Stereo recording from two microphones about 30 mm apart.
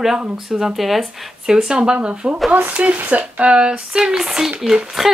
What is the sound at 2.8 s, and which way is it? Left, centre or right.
Speech, right.